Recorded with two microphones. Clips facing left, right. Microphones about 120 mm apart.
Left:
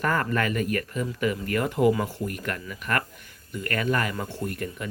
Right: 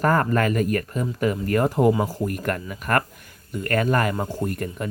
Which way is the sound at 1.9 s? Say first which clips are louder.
Right 3 dB; 30° right (ahead or behind).